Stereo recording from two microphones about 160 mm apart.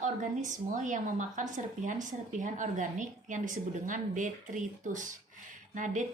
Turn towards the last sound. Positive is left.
turn(degrees=-55)  # may be behind; listen again after turning